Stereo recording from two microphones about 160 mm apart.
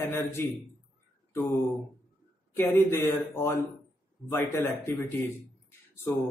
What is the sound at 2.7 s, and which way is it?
Speech, 15° left (ahead or behind).